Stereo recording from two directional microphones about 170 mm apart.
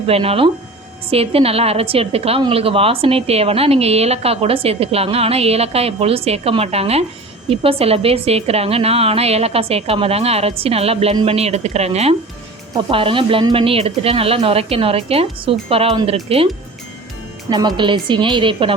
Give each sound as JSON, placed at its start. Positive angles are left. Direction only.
{"t": 0.1, "sound": "a woman's voice", "side_deg": -35}
{"t": 17.5, "sound": "a woman's voice", "side_deg": -25}